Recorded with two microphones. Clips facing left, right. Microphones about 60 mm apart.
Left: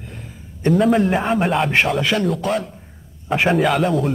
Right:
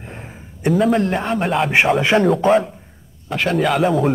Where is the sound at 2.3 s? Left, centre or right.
Centre.